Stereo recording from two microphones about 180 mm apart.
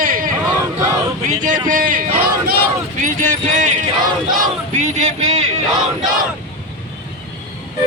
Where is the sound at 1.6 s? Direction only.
50° right (ahead or behind).